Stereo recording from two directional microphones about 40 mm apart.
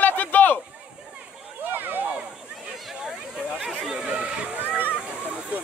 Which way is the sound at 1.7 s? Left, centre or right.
Right.